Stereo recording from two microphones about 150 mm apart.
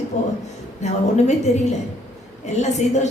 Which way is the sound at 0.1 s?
50° left (ahead or behind).